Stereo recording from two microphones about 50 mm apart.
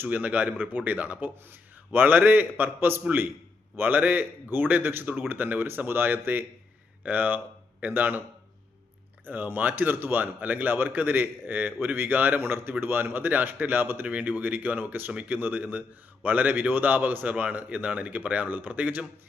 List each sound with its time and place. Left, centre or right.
0.0 s a man's voice: right
9.2 s a man's voice: right